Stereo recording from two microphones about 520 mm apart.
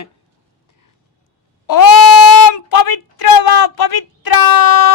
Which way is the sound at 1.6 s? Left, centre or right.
Left.